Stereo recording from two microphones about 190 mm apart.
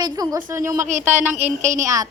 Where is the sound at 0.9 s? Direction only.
40° right (ahead or behind).